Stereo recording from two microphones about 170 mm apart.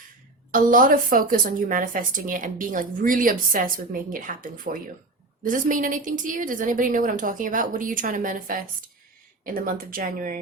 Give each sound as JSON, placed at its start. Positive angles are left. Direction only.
{"t": 0.5, "sound": "speech", "side_deg": -50}